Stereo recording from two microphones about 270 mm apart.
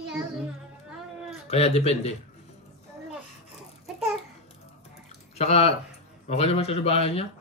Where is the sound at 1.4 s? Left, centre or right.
Left.